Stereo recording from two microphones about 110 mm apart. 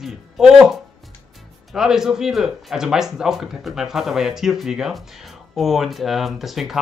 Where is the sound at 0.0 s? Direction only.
5° right (ahead or behind).